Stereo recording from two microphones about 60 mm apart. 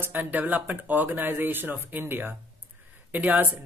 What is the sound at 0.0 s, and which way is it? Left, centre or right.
Speech, right.